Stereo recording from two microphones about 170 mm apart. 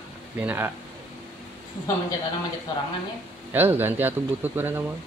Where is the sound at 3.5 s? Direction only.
10° right (ahead or behind).